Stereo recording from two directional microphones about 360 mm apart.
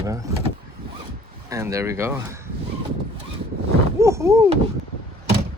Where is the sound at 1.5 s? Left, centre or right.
Centre.